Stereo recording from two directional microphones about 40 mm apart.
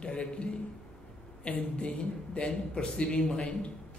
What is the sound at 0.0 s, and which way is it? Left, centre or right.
A man's voice, left.